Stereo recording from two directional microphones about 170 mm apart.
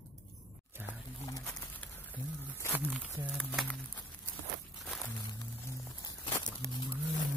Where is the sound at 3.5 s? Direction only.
Centre (ahead or behind).